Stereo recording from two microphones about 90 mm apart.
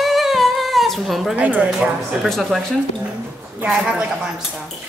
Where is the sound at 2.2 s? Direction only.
5° left (ahead or behind).